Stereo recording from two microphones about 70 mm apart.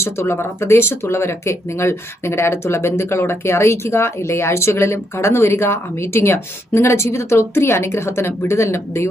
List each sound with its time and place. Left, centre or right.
0.0 s speech: left